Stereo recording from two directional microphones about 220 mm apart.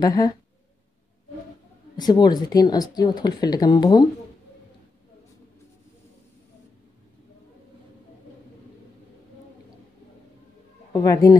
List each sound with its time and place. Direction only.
0.0 s speech: 15° left (ahead or behind)
2.0 s speech: 20° left (ahead or behind)
10.9 s speech: 15° left (ahead or behind)